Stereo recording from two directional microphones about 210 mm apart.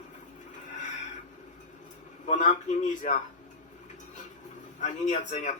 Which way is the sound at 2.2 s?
35° left (ahead or behind).